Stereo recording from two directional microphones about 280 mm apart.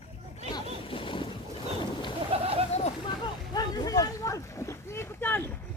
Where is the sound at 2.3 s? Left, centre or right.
Right.